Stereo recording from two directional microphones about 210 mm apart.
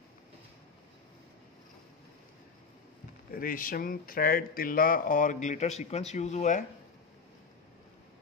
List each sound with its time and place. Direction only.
3.3 s speech: 40° left (ahead or behind)